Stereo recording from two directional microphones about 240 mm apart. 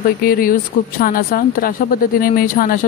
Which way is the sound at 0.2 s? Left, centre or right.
Left.